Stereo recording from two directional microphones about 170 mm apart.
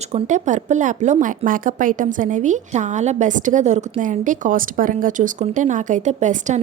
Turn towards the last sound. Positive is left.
turn(degrees=-45)  # may be behind; listen again after turning